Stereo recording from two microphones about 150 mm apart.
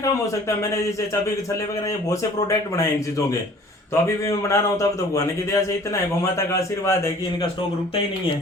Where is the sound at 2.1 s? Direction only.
20° left (ahead or behind).